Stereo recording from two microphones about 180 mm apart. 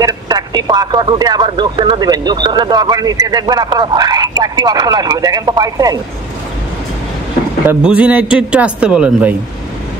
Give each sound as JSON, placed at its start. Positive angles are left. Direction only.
{"t": 0.0, "sound": "speech", "side_deg": -20}
{"t": 7.6, "sound": "a man's voice", "side_deg": -5}